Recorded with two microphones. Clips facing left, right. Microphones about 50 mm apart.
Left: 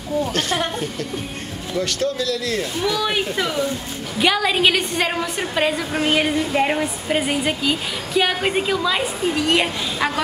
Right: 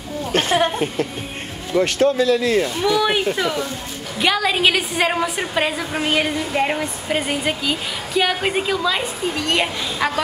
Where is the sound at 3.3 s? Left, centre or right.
Centre.